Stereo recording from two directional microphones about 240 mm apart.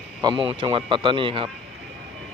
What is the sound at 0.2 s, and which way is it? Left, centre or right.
Speech, centre.